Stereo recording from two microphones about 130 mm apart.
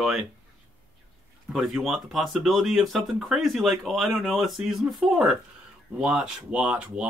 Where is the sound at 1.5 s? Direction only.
Centre (ahead or behind).